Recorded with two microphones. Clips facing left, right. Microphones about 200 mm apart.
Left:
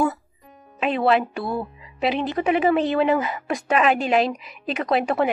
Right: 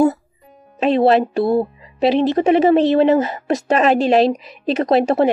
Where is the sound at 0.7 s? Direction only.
35° right (ahead or behind).